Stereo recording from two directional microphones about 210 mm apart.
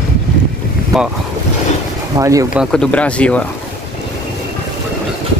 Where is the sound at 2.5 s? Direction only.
5° left (ahead or behind).